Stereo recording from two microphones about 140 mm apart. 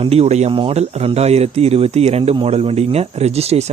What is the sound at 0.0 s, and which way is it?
Speech, 45° right (ahead or behind).